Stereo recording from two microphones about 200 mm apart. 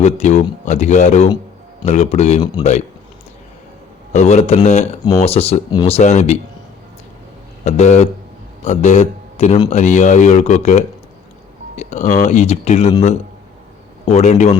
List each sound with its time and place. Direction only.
0.0 s speech: 35° left (ahead or behind)
4.1 s speech: 35° left (ahead or behind)
7.6 s speech: 35° left (ahead or behind)